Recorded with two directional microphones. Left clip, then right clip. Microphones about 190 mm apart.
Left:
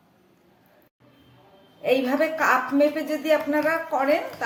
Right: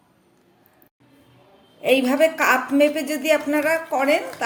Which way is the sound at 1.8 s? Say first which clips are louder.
Right 4 dB; 40° right (ahead or behind).